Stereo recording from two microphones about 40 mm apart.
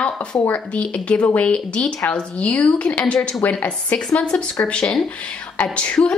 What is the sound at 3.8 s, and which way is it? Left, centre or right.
Speech, left.